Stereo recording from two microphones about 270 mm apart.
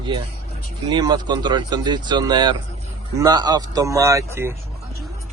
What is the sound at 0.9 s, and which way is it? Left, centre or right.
Speech, centre.